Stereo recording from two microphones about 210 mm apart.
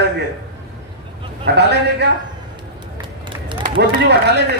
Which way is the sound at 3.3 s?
25° right (ahead or behind).